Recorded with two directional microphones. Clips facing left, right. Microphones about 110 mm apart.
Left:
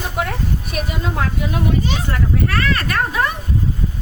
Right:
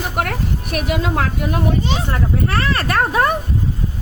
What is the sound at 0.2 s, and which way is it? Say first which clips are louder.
Speech: even; 65° right (ahead or behind).